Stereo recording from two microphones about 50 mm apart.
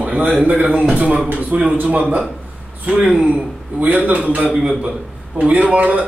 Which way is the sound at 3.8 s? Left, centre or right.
Right.